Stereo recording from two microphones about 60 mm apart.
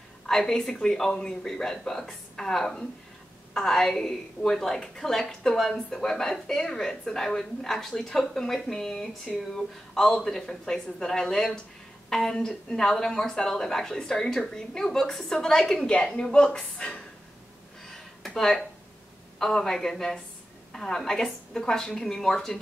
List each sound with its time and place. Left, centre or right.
0.3 s speech: centre
17.8 s a sound: centre
19.3 s speech: centre